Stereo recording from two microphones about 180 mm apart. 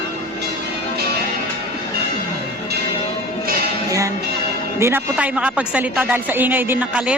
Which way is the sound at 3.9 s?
20° right (ahead or behind).